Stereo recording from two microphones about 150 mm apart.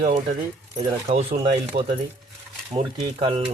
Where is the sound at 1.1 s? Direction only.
45° right (ahead or behind).